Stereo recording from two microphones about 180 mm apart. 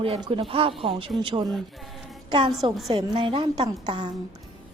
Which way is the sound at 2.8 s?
25° right (ahead or behind).